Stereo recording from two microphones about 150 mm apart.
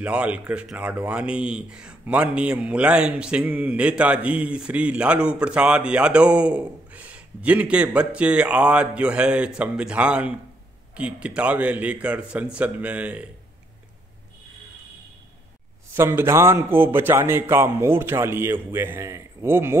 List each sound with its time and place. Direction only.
0.0 s speech: 10° right (ahead or behind)
16.0 s speech: 15° right (ahead or behind)